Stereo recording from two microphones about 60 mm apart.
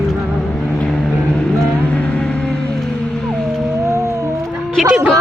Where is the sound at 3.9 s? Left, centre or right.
Right.